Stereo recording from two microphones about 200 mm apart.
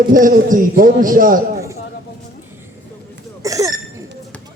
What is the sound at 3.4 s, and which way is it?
Hiccup, 15° right (ahead or behind).